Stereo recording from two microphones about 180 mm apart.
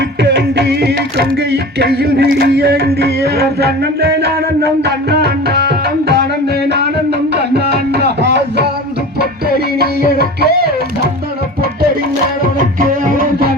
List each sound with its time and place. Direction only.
0.2 s music: 70° right (ahead or behind)
9.7 s music: 60° right (ahead or behind)